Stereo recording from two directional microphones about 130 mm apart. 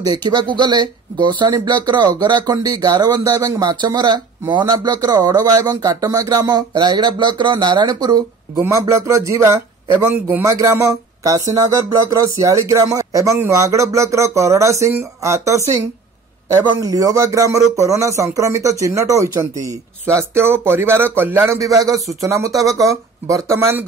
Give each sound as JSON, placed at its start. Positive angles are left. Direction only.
{"t": 0.0, "sound": "speech", "side_deg": -30}